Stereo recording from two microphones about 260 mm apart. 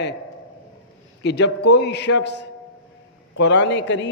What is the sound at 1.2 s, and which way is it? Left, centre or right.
A man's voice, left.